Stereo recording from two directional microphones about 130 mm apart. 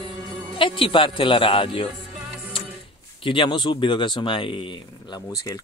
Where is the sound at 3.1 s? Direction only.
40° left (ahead or behind).